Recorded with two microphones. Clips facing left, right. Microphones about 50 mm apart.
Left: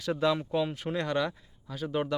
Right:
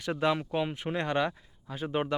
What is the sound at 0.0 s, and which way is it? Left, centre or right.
Speech, right.